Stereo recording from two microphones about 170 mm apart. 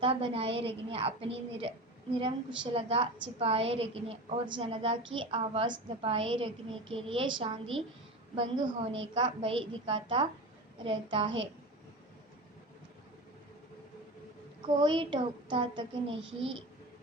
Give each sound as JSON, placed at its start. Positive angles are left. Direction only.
{"t": 0.0, "sound": "a child's voice", "side_deg": -35}
{"t": 2.7, "sound": "a woman's voice", "side_deg": -35}
{"t": 14.8, "sound": "a child's voice", "side_deg": -30}